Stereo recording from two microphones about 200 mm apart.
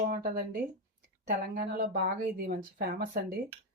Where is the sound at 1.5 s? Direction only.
45° right (ahead or behind).